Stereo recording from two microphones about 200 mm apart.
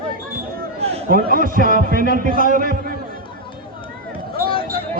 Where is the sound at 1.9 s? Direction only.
45° right (ahead or behind).